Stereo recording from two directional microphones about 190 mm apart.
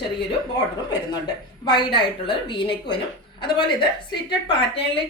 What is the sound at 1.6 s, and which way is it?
Speech, 25° left (ahead or behind).